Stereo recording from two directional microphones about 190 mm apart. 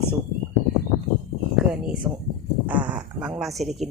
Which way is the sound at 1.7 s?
5° right (ahead or behind).